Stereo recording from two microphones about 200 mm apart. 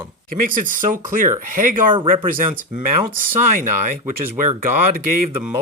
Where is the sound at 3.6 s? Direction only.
40° right (ahead or behind).